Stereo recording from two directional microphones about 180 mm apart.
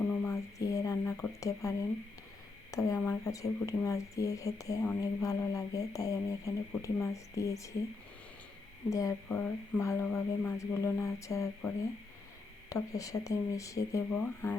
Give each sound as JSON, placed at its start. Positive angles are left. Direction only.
{"t": 0.3, "sound": "a sound", "side_deg": 20}
{"t": 2.7, "sound": "speech", "side_deg": 15}
{"t": 8.9, "sound": "speech", "side_deg": 15}
{"t": 12.7, "sound": "speech", "side_deg": 20}